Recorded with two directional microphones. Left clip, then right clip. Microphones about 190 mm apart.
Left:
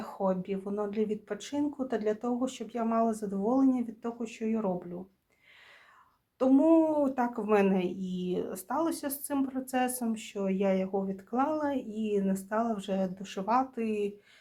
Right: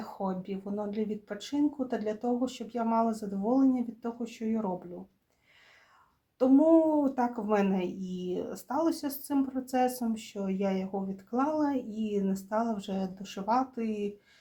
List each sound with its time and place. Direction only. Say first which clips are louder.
0.0 s speech: left 4 dB; 25° left (ahead or behind)
6.4 s speech: right 1 dB; 25° left (ahead or behind)